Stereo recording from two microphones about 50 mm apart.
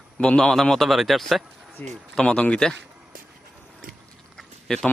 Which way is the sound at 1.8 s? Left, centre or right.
Left.